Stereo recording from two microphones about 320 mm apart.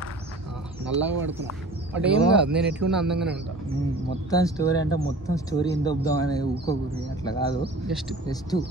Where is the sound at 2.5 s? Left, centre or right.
Centre.